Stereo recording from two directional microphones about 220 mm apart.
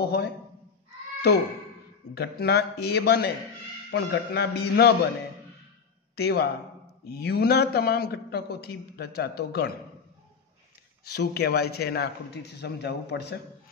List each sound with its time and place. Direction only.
0.0 s a man's voice: 45° left (ahead or behind)
2.1 s a man's voice: 45° left (ahead or behind)
6.1 s a man's voice: 45° left (ahead or behind)
11.1 s a man's voice: 45° left (ahead or behind)